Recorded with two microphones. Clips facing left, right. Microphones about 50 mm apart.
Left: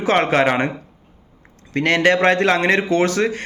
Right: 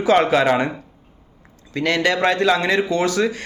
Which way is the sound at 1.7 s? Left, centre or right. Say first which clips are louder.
Left 3 dB; left.